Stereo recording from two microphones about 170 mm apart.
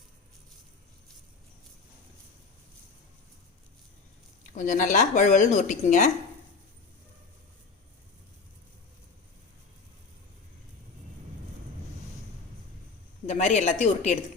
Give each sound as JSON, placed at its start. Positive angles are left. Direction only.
{"t": 4.5, "sound": "speech", "side_deg": 50}
{"t": 13.2, "sound": "speech", "side_deg": 40}